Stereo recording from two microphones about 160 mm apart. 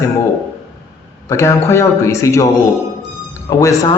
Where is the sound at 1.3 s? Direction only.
15° left (ahead or behind).